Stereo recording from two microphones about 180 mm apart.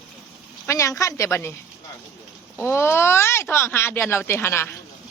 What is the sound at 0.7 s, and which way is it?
Speech, 15° left (ahead or behind).